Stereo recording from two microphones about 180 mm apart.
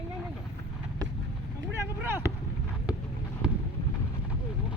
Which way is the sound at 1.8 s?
10° right (ahead or behind).